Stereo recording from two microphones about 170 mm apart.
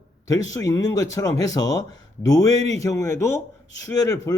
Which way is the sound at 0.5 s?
20° left (ahead or behind).